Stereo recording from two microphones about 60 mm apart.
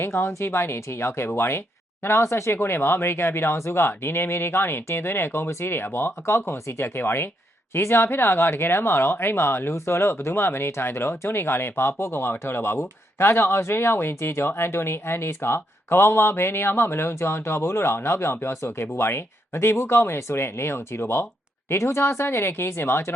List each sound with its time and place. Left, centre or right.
0.0 s speech: left